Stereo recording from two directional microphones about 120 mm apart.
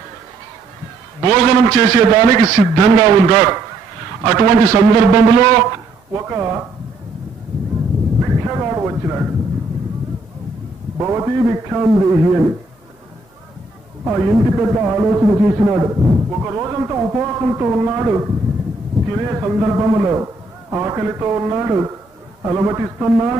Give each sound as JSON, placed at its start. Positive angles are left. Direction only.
{"t": 1.2, "sound": "a man's voice", "side_deg": -25}
{"t": 8.2, "sound": "a sound", "side_deg": -25}
{"t": 11.0, "sound": "a man's voice", "side_deg": -25}
{"t": 14.0, "sound": "a man's voice", "side_deg": -20}